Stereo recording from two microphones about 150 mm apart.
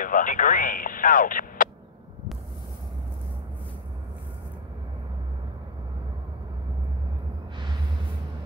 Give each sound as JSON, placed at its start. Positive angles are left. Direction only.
{"t": 0.0, "sound": "speech", "side_deg": 60}